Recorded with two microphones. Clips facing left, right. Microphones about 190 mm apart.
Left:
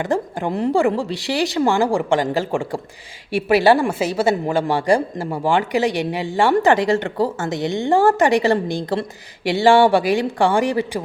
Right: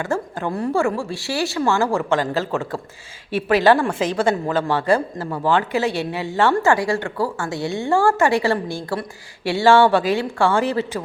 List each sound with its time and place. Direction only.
0.0 s speech: 15° left (ahead or behind)